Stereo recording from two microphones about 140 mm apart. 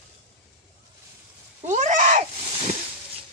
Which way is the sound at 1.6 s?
60° right (ahead or behind).